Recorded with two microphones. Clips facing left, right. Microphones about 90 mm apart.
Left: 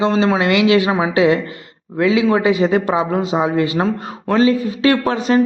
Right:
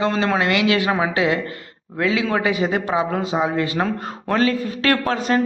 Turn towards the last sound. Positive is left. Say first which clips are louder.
# left 4 dB
turn(degrees=15)  # may be behind; listen again after turning